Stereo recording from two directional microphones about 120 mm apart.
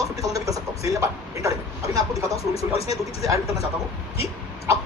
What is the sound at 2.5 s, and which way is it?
Speech, 55° left (ahead or behind).